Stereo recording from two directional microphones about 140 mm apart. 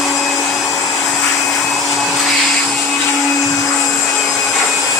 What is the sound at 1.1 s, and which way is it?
Vacuum cleaner, centre (ahead or behind).